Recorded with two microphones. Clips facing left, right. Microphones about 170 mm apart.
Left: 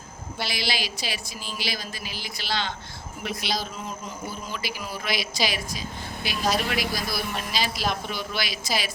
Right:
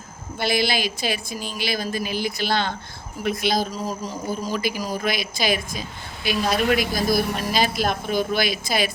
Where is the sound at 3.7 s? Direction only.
35° right (ahead or behind); by 8.9 s 55° right (ahead or behind).